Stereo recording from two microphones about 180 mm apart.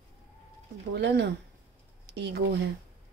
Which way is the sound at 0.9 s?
70° right (ahead or behind).